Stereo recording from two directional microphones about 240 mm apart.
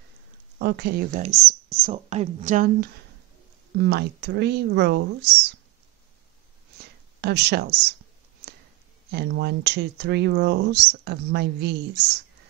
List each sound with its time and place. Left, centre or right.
0.6 s speech: right
3.7 s speech: right
6.8 s a sound: right
9.1 s speech: right